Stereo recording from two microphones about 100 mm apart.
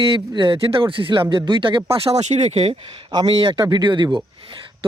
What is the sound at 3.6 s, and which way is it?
Speech, 45° right (ahead or behind).